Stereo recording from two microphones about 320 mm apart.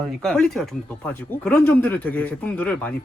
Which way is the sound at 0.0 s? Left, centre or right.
Centre.